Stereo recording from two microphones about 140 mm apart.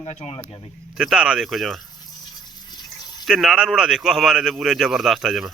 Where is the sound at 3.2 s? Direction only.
5° right (ahead or behind).